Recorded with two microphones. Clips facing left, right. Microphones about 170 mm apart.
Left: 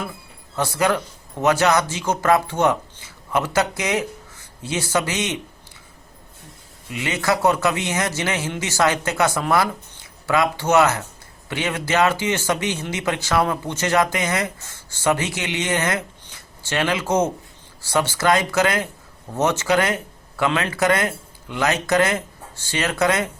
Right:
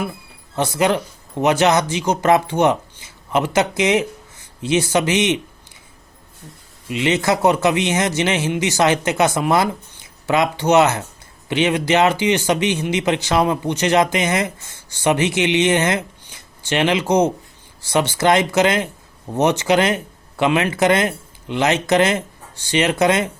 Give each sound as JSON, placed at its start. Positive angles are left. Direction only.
{"t": 0.5, "sound": "speech", "side_deg": -20}
{"t": 6.8, "sound": "speech", "side_deg": -20}